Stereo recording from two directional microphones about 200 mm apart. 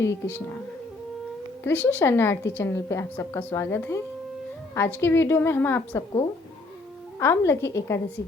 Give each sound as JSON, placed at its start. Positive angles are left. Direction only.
{"t": 0.0, "sound": "a woman's voice", "side_deg": 10}
{"t": 1.6, "sound": "a woman's voice", "side_deg": 10}
{"t": 7.2, "sound": "a woman's voice", "side_deg": 15}